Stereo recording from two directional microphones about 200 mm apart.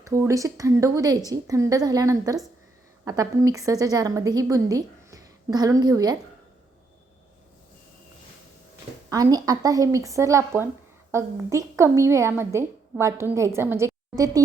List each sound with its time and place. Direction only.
0.1 s a woman's voice: 15° right (ahead or behind)
9.0 s a woman's voice: 20° right (ahead or behind)